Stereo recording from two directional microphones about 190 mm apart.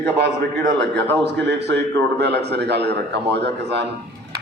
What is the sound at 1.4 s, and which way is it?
A man's voice, 60° right (ahead or behind).